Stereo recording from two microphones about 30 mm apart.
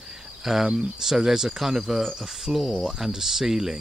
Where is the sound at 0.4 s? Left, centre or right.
Centre.